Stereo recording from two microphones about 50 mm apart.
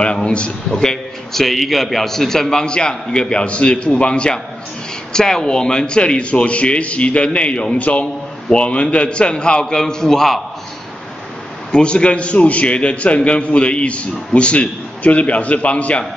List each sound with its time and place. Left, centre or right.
0.0 s a man's voice: left
0.7 s a man's voice: centre
11.7 s a man's voice: left